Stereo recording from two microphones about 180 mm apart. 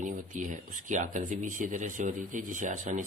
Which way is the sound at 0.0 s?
45° right (ahead or behind).